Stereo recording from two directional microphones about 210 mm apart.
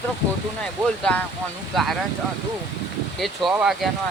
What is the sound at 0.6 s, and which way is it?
Speech, 5° left (ahead or behind).